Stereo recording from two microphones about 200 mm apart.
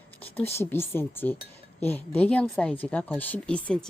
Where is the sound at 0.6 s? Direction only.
10° left (ahead or behind).